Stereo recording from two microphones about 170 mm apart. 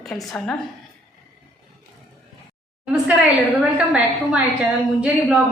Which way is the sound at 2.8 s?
5° right (ahead or behind).